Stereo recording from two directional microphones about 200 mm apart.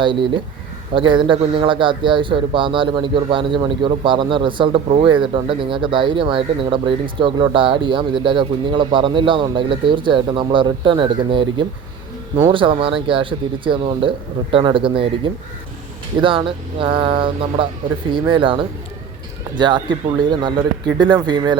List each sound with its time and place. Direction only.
0.0 s a man's voice: 25° right (ahead or behind)
21.0 s a man's voice: 20° right (ahead or behind)